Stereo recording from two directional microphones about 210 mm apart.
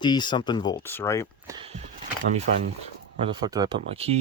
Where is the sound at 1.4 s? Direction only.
25° right (ahead or behind).